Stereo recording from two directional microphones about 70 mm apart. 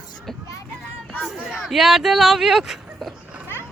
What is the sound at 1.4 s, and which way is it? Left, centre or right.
Speech, centre.